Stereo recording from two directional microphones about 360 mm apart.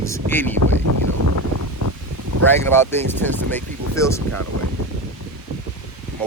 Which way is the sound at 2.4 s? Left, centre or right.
Centre.